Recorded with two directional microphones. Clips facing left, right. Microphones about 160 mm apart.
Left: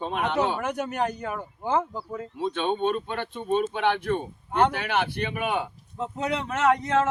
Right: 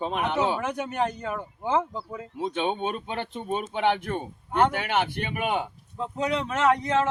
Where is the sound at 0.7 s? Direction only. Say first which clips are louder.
Even; 5° left (ahead or behind).